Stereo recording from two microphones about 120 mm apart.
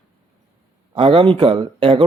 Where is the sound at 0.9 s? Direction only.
45° right (ahead or behind).